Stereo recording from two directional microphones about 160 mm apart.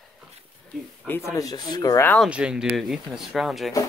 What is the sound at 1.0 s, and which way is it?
Speech, 15° left (ahead or behind).